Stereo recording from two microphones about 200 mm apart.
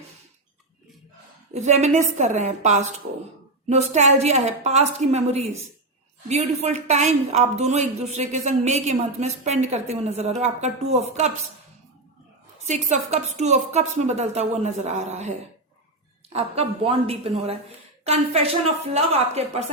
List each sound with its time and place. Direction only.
1.5 s a woman's voice: 35° right (ahead or behind)
12.6 s a woman's voice: 35° right (ahead or behind)
16.3 s a woman's voice: 30° right (ahead or behind)